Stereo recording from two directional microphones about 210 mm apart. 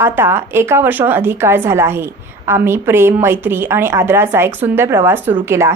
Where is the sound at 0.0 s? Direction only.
10° right (ahead or behind).